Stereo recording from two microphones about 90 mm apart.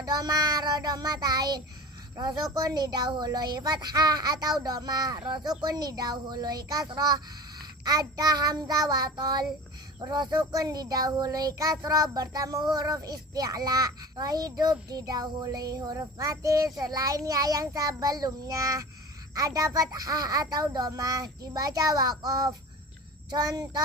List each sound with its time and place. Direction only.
0.0 s a child's voice: 45° right (ahead or behind)